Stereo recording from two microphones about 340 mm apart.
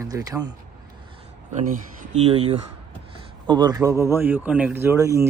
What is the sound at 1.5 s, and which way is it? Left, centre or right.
Speech, right.